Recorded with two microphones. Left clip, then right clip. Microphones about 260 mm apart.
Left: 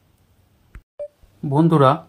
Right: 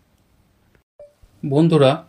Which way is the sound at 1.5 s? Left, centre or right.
Left.